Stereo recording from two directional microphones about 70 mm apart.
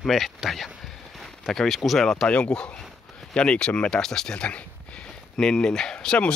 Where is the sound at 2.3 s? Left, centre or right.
Centre.